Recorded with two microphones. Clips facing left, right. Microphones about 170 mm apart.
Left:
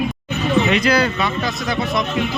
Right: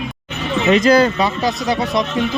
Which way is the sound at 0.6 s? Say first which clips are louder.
Right 5 dB; 45° right (ahead or behind).